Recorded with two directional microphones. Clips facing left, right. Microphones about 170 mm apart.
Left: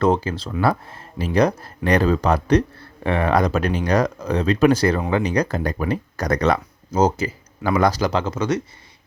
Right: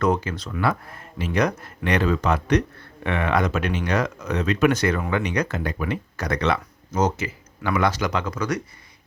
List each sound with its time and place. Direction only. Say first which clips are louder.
0.0 s speech: left 3 dB; 30° left (ahead or behind)